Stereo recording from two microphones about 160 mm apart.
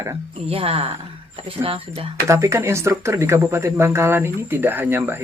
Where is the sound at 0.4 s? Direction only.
35° right (ahead or behind).